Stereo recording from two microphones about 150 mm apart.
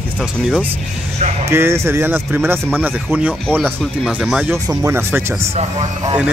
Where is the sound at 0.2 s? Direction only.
5° right (ahead or behind).